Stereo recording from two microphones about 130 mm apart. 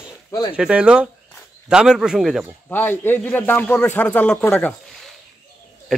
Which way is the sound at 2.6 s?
15° left (ahead or behind).